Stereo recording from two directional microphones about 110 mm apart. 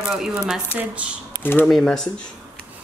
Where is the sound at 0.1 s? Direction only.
5° right (ahead or behind).